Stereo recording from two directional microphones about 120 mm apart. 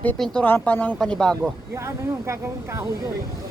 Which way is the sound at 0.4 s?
15° left (ahead or behind).